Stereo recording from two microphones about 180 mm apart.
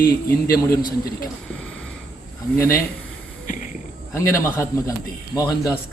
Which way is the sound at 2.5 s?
15° left (ahead or behind).